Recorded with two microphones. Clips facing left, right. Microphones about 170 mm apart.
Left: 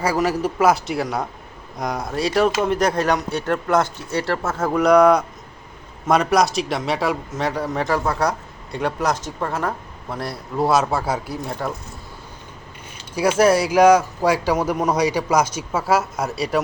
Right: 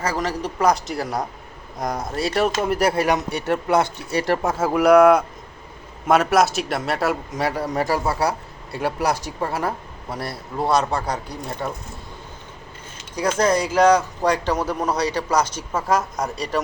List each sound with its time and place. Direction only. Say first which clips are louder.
0.0 s a man's voice: left 4 dB; 10° left (ahead or behind)
13.1 s speech: left 4 dB; 10° left (ahead or behind)